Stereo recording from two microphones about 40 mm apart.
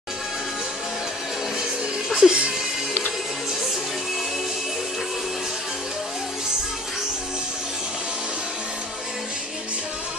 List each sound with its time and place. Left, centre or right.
2.1 s music: right